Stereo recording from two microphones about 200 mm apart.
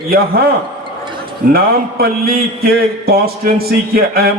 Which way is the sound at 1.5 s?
50° right (ahead or behind).